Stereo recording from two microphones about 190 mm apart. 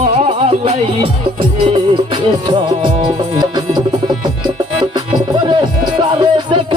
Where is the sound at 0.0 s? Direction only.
35° right (ahead or behind).